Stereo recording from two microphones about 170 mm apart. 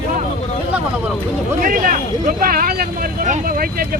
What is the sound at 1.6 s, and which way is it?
Speech, 50° right (ahead or behind).